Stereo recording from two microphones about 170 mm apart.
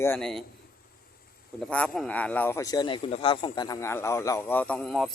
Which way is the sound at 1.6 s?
5° left (ahead or behind).